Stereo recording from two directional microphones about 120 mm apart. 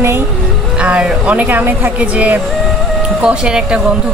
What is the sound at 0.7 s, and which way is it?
A woman's voice, 10° right (ahead or behind).